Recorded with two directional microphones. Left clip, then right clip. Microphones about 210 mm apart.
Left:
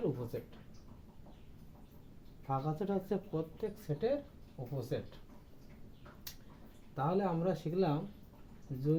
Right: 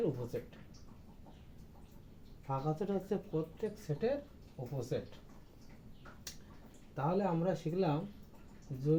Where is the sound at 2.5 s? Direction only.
20° left (ahead or behind).